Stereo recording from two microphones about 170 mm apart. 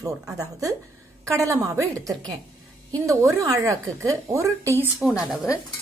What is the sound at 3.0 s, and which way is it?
Cutlery, 20° right (ahead or behind).